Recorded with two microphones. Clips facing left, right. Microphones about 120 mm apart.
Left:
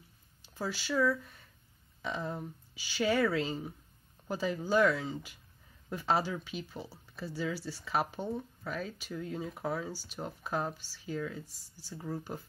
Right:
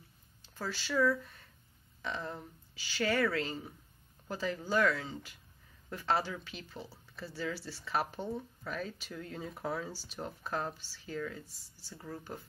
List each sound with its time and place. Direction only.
0.6 s speech: 10° left (ahead or behind)
6.9 s speech: centre (ahead or behind)